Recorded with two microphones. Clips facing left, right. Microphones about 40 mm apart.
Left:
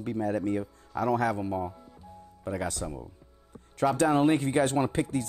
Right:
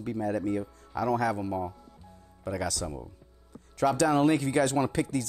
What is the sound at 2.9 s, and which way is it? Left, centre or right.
Speech, centre.